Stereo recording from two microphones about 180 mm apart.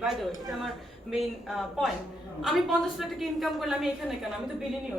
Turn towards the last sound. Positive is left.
turn(degrees=0)  # may be behind; listen again after turning